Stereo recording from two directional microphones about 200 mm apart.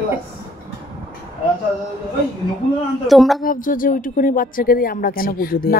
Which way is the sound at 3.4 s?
45° left (ahead or behind).